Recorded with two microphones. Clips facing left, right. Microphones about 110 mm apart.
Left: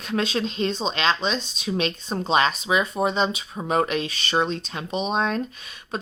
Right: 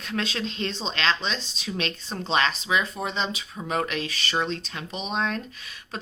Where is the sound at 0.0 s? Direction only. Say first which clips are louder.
Left 5 dB; 20° left (ahead or behind).